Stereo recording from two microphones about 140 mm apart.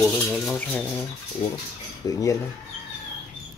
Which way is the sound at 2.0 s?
25° left (ahead or behind).